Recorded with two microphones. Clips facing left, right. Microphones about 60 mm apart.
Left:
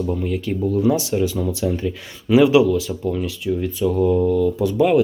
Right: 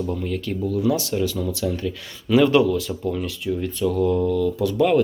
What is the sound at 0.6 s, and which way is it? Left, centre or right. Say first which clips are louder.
Speech: left 3 dB; left.